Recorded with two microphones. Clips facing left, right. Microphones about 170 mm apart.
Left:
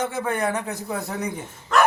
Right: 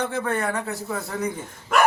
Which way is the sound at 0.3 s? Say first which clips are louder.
Left 1 dB; 15° left (ahead or behind).